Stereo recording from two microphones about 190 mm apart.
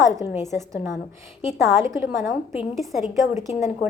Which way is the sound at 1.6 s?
15° right (ahead or behind).